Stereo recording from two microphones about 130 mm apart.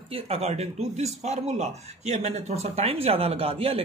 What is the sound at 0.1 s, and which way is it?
Speech, 50° right (ahead or behind).